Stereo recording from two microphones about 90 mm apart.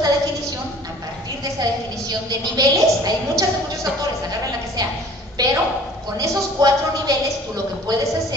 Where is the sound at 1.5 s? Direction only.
45° right (ahead or behind).